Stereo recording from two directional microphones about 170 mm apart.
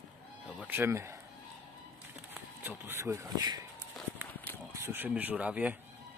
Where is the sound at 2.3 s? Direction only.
10° right (ahead or behind).